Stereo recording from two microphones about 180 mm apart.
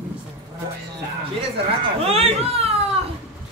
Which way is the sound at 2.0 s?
35° right (ahead or behind).